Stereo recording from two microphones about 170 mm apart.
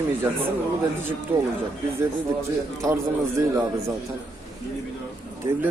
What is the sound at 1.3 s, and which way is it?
Speech, 15° right (ahead or behind).